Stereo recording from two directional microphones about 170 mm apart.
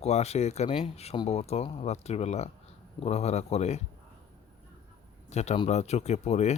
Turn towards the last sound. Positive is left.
turn(degrees=40)  # may be behind; listen again after turning